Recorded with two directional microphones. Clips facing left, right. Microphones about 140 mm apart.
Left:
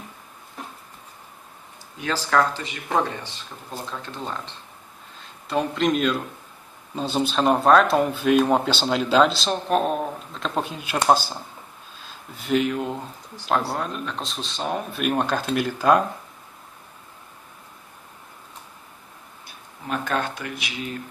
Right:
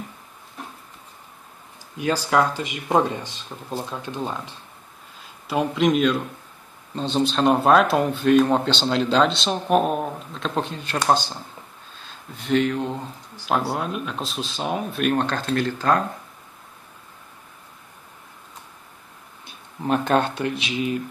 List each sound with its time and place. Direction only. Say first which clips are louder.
2.0 s speech: right 2 dB; 15° right (ahead or behind); by 16.0 s 10° left (ahead or behind)
19.4 s speech: right 9 dB; 30° right (ahead or behind)